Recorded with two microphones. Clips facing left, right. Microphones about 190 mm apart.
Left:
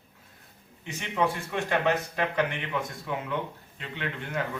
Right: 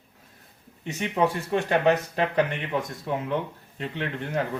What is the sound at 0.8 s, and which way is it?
Speech, 40° right (ahead or behind).